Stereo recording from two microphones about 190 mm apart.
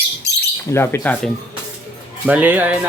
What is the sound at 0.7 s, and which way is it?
Speech, 15° left (ahead or behind).